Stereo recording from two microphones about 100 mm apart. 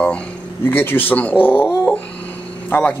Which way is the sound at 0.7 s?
20° left (ahead or behind).